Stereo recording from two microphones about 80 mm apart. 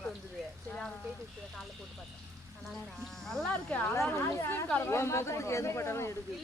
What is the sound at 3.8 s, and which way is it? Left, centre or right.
Speech, left.